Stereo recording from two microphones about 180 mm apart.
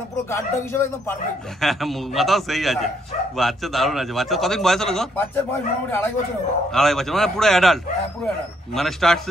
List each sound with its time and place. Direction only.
0.3 s a man's voice: 15° left (ahead or behind)
1.6 s a man's voice: centre (ahead or behind)
6.7 s a man's voice: centre (ahead or behind)